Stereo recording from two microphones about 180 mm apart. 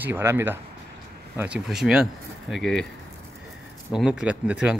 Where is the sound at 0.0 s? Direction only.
10° right (ahead or behind).